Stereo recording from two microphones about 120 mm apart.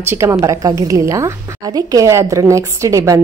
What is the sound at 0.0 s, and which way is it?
A woman's voice, 20° right (ahead or behind).